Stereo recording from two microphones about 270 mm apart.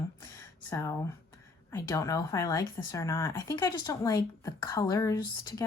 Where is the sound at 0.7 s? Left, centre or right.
Centre.